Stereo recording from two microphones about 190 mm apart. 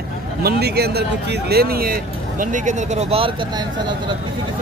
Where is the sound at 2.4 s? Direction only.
40° right (ahead or behind).